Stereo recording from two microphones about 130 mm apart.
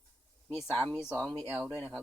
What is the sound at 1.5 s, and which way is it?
Speech, 10° right (ahead or behind).